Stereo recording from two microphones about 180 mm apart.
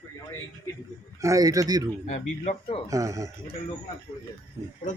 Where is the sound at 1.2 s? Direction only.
20° right (ahead or behind).